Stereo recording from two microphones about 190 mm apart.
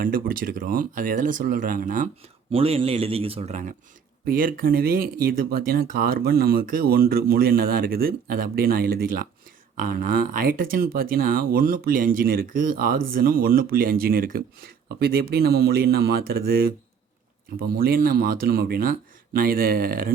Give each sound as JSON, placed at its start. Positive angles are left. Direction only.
{"t": 0.0, "sound": "speech", "side_deg": -50}
{"t": 2.5, "sound": "a man's voice", "side_deg": -30}